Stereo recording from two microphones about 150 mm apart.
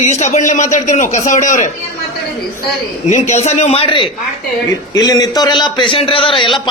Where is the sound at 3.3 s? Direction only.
50° left (ahead or behind).